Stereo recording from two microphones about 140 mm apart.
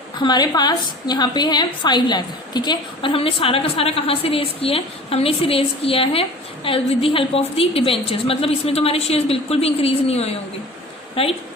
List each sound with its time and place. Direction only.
0.2 s a woman's voice: 30° left (ahead or behind)